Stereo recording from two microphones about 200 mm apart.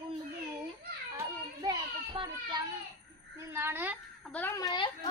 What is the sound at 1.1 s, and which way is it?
A child's voice, 20° right (ahead or behind).